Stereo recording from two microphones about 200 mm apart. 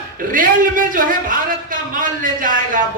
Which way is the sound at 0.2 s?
45° right (ahead or behind).